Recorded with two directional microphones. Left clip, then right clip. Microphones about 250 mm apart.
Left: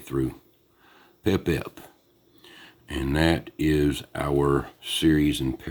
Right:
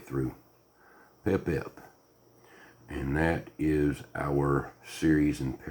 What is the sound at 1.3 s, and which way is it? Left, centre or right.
Speech, left.